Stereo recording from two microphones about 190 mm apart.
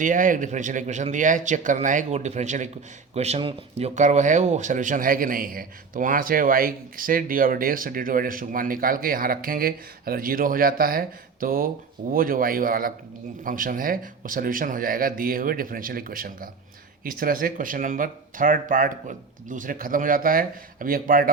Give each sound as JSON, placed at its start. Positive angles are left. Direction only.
{"t": 0.0, "sound": "speech", "side_deg": -45}